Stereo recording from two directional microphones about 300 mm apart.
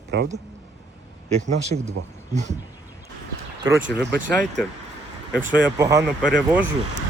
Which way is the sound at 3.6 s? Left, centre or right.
Centre.